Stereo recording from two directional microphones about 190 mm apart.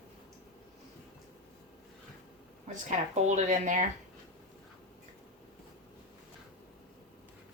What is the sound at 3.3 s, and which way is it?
Speech, 40° right (ahead or behind).